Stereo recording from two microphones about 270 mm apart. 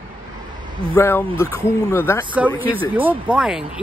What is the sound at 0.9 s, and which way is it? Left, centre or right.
Speech, centre.